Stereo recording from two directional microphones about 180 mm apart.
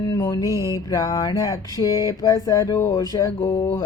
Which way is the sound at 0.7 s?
20° left (ahead or behind).